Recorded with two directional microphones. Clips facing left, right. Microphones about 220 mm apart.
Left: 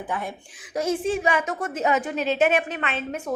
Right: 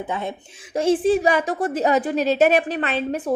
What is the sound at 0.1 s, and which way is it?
A woman's voice, 25° right (ahead or behind).